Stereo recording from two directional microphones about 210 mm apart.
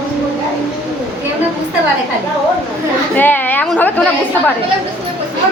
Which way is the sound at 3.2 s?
10° left (ahead or behind).